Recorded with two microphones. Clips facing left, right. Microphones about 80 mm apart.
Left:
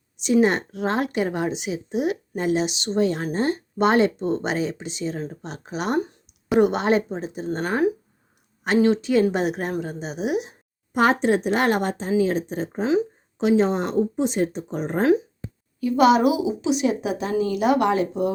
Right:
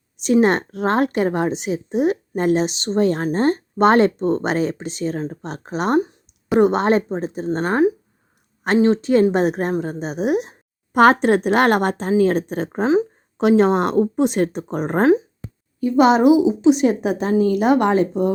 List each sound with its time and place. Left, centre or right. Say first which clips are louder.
0.4 s a woman's voice: right 4 dB; right
6.0 s a sound: right 4 dB; centre
6.6 s a woman's voice: right 3 dB; right
10.9 s a woman's voice: right 6 dB; right
15.8 s a woman's voice: right 3 dB; right